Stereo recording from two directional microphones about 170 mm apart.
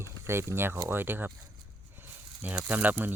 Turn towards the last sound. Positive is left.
turn(degrees=-10)  # may be behind; listen again after turning